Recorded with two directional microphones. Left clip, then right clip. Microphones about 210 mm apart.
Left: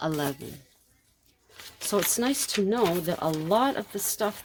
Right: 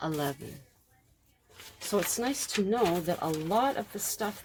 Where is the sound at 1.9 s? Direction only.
40° left (ahead or behind).